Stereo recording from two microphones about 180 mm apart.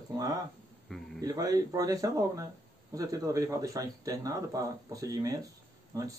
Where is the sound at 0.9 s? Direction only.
Centre (ahead or behind).